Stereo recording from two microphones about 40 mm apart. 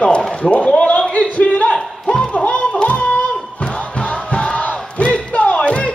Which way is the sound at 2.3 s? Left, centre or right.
Left.